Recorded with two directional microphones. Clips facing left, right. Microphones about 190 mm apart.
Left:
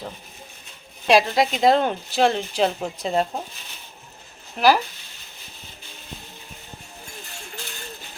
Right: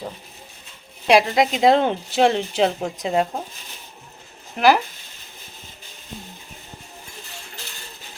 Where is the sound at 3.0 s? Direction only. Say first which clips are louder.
Right 1 dB; 10° right (ahead or behind).